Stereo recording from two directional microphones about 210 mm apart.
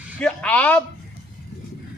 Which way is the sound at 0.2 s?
5° left (ahead or behind).